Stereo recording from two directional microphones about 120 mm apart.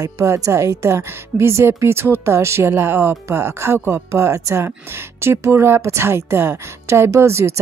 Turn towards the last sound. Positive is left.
turn(degrees=-20)  # may be behind; listen again after turning